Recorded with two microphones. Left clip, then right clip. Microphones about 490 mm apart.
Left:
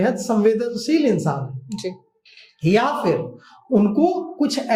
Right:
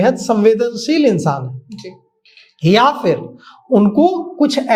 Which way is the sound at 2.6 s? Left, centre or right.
Right.